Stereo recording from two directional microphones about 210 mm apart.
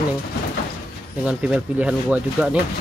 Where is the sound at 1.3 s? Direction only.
5° right (ahead or behind).